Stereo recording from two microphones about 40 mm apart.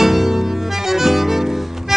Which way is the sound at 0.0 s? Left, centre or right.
Centre.